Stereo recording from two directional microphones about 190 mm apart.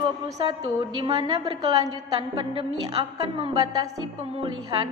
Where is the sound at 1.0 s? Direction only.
25° right (ahead or behind).